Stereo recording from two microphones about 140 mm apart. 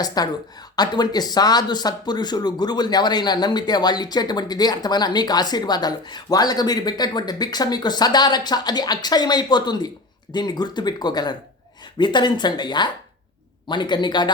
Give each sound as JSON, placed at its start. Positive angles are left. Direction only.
{"t": 0.0, "sound": "speech", "side_deg": 30}